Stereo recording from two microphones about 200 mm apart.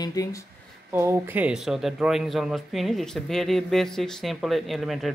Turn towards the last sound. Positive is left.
turn(degrees=0)  # may be behind; listen again after turning